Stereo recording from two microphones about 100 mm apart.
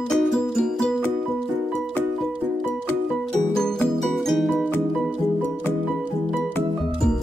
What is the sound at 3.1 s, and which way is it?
Music, 5° left (ahead or behind).